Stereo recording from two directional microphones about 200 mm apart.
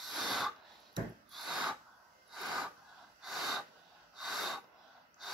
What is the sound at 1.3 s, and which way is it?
Gasp, centre (ahead or behind).